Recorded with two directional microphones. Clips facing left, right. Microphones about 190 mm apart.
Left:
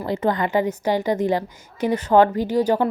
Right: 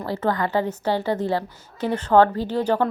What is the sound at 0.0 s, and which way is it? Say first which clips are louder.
Speech: left 2 dB; 20° left (ahead or behind).